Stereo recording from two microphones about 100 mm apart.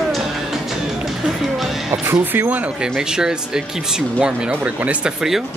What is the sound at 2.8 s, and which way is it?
Speech, 5° right (ahead or behind).